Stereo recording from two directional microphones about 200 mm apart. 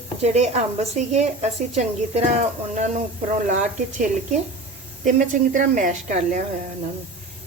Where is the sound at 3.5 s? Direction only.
40° right (ahead or behind).